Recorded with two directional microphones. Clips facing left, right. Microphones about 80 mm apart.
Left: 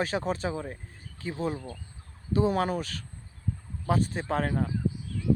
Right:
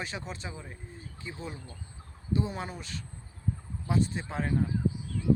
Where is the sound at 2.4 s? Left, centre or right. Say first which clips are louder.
Left 9 dB; left.